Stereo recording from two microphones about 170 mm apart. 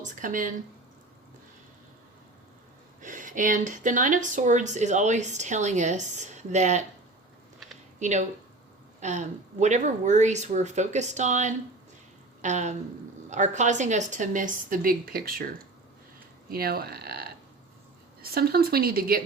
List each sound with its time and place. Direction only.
0.0 s speech: 50° right (ahead or behind)
3.0 s speech: 50° right (ahead or behind)
7.9 s speech: 45° right (ahead or behind)
16.5 s speech: 60° right (ahead or behind)